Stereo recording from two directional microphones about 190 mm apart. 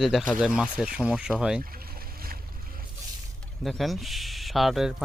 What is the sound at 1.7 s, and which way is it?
Boat, 50° right (ahead or behind).